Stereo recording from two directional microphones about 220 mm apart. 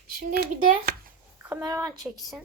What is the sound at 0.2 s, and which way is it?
Speech, 45° right (ahead or behind).